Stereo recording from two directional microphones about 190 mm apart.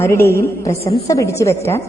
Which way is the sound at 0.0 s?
15° left (ahead or behind).